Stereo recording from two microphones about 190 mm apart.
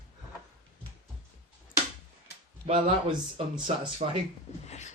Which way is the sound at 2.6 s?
30° right (ahead or behind).